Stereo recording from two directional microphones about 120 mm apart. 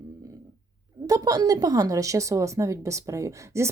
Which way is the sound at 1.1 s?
30° right (ahead or behind).